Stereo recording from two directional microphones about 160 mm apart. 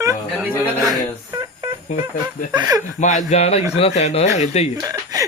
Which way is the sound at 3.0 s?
50° left (ahead or behind).